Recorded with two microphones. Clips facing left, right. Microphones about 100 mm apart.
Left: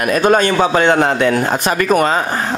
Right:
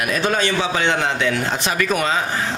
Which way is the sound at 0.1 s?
50° left (ahead or behind).